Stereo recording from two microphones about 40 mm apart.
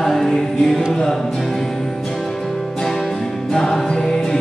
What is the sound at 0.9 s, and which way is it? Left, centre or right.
Music, centre.